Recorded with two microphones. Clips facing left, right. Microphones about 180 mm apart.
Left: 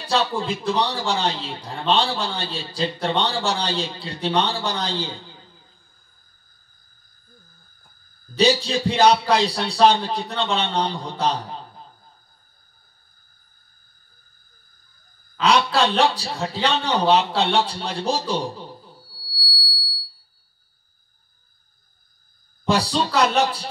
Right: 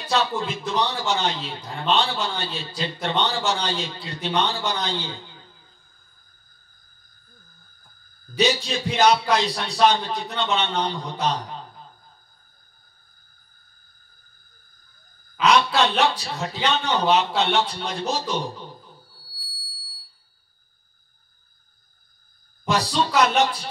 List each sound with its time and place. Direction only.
0.1 s a man's voice: 30° left (ahead or behind)
8.4 s a man's voice: 30° left (ahead or behind)
15.3 s a man's voice: 30° left (ahead or behind)
19.4 s fire alarm: 35° left (ahead or behind)
22.7 s a man's voice: 30° left (ahead or behind)